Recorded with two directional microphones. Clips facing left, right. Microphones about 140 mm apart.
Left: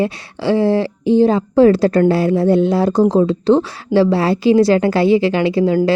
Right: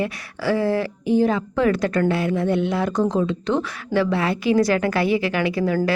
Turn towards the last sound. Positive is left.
turn(degrees=25)  # may be behind; listen again after turning